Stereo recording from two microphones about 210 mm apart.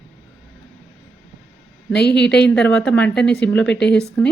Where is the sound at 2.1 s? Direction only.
5° left (ahead or behind).